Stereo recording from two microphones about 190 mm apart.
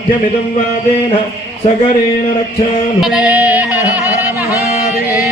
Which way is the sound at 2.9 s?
5° right (ahead or behind).